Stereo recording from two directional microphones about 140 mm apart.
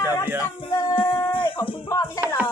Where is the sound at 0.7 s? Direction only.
25° left (ahead or behind).